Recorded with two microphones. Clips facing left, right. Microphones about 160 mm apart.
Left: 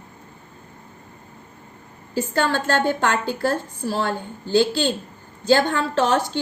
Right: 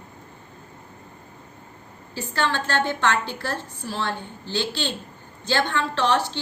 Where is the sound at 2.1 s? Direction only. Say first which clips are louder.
Left 4 dB; 40° left (ahead or behind).